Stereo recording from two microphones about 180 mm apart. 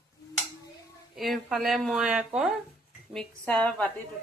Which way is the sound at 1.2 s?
Centre (ahead or behind).